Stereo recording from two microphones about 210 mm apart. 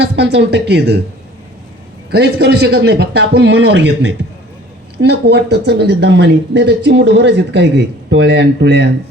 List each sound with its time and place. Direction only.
0.0 s speech: 50° right (ahead or behind)
2.0 s speech: 50° right (ahead or behind)